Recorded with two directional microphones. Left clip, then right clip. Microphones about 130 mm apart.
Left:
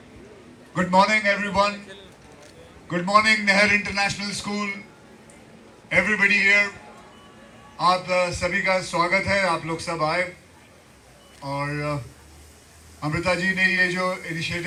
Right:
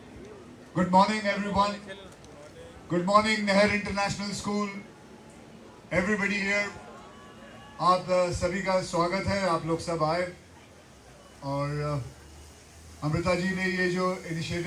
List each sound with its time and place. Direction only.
0.7 s a man's voice: 30° left (ahead or behind)
2.9 s a man's voice: 30° left (ahead or behind)
5.9 s a man's voice: 30° left (ahead or behind)
7.8 s a man's voice: 30° left (ahead or behind)
11.4 s a man's voice: 35° left (ahead or behind)
13.0 s a man's voice: 30° left (ahead or behind)